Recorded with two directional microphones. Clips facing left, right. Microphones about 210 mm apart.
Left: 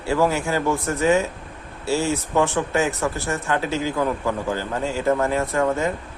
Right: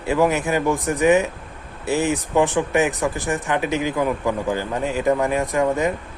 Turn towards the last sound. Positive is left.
turn(degrees=-15)  # may be behind; listen again after turning